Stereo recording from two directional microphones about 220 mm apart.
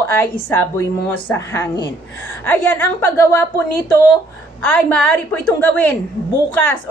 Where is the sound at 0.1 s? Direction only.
10° left (ahead or behind).